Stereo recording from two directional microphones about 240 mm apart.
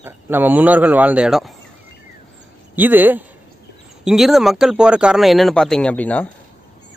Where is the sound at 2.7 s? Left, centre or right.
Centre.